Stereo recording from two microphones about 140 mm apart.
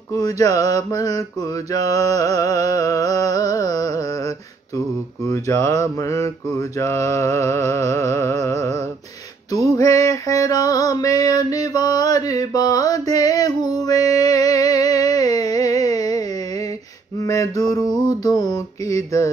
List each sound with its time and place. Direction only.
0.1 s music: 25° left (ahead or behind)